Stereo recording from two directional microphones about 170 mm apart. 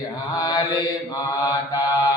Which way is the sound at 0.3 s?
20° left (ahead or behind).